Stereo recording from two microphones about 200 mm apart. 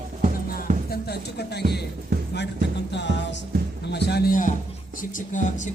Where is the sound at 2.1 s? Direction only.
45° right (ahead or behind).